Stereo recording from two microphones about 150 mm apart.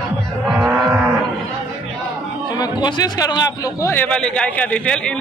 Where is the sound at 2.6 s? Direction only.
30° left (ahead or behind).